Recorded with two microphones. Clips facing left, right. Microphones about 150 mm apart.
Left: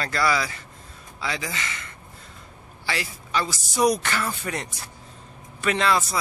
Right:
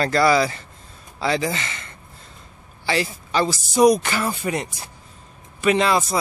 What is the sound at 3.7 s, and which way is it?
Speech, 15° right (ahead or behind).